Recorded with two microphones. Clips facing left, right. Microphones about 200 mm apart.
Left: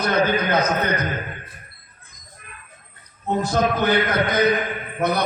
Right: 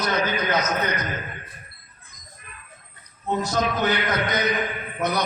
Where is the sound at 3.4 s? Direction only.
55° left (ahead or behind).